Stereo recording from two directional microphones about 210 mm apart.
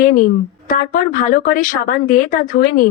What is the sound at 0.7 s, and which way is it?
Speech, 40° left (ahead or behind).